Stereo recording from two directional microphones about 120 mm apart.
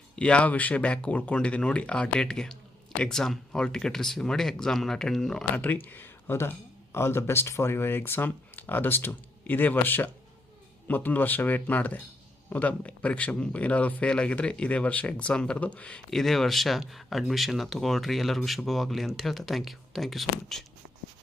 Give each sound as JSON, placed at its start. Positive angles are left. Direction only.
{"t": 0.2, "sound": "speech", "side_deg": 10}
{"t": 5.5, "sound": "speech", "side_deg": 15}